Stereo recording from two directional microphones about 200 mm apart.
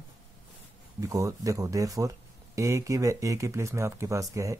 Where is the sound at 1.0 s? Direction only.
15° right (ahead or behind).